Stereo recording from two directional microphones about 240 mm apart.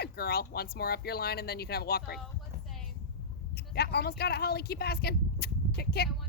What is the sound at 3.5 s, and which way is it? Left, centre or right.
Speech, left.